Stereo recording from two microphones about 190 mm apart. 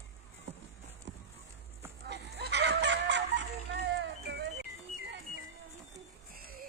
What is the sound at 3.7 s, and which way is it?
Music, 65° right (ahead or behind).